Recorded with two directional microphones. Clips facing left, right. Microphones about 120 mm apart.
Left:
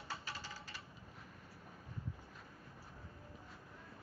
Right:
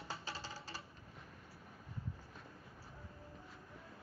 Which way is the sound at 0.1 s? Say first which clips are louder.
Right 1 dB; 30° right (ahead or behind).